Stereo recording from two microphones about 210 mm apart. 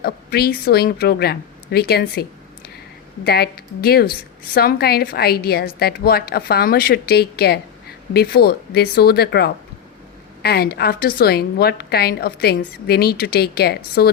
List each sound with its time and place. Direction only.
0.0 s speech: 50° left (ahead or behind)
3.2 s speech: 50° left (ahead or behind)